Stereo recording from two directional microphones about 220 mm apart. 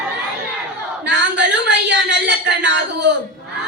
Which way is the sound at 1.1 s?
50° right (ahead or behind).